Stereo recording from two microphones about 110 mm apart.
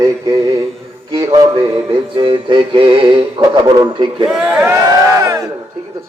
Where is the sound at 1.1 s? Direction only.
40° right (ahead or behind).